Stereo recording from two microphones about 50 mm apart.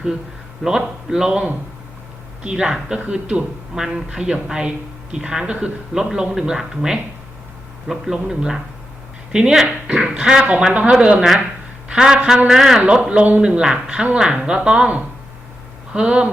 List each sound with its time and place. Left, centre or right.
0.6 s speech: centre
3.0 s speech: right
3.8 s speech: centre
12.8 s speech: right